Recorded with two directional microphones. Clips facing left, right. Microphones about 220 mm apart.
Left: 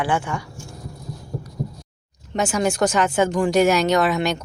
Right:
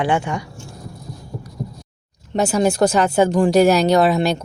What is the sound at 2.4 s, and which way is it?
Speech, 35° right (ahead or behind).